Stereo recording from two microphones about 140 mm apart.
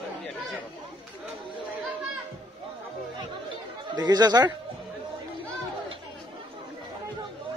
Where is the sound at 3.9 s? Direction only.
30° right (ahead or behind).